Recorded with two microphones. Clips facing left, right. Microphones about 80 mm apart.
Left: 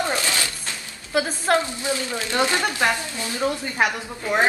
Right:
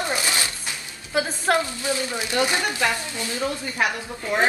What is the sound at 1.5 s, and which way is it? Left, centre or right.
Speech, left.